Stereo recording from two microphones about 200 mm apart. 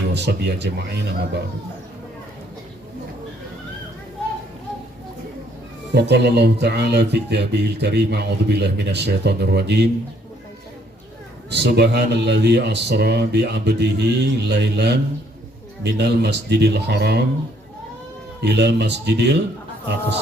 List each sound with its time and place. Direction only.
0.1 s speech: 55° right (ahead or behind)
5.9 s speech: 55° right (ahead or behind)
11.5 s speech: 55° right (ahead or behind)
18.3 s speech: 60° right (ahead or behind)